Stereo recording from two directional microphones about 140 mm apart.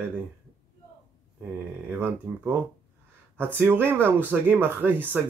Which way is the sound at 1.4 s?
15° right (ahead or behind).